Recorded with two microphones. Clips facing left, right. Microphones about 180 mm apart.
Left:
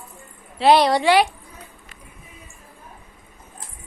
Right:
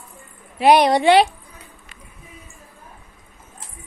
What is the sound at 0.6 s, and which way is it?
Speech, 15° right (ahead or behind).